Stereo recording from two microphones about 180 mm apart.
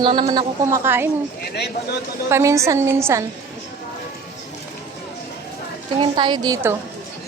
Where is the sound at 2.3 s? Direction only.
15° right (ahead or behind).